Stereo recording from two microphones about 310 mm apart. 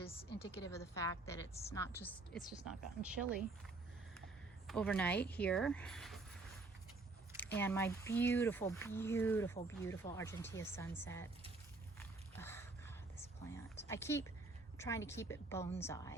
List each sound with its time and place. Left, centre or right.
0.6 s a woman's voice: centre
4.6 s a woman's voice: centre
7.6 s speech: centre
11.9 s a sound: centre
13.8 s speech: centre